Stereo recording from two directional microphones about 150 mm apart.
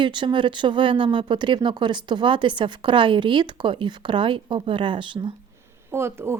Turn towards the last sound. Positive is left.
turn(degrees=-15)  # may be behind; listen again after turning